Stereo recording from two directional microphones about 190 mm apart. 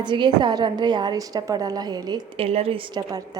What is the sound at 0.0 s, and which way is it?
A woman's voice, 25° right (ahead or behind).